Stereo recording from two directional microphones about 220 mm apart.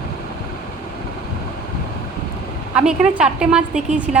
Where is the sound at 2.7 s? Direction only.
5° right (ahead or behind).